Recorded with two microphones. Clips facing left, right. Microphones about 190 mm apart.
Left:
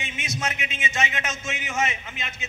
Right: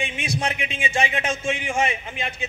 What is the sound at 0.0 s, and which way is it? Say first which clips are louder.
A man's voice: right 5 dB; 30° right (ahead or behind).